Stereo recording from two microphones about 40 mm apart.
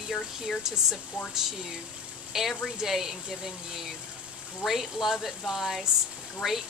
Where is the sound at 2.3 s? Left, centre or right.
Centre.